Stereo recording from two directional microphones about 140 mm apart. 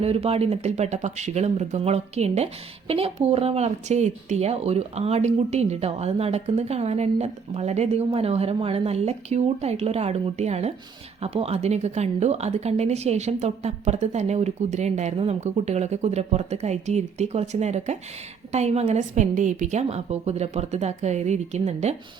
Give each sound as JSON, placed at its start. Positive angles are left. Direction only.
{"t": 0.0, "sound": "speech", "side_deg": -45}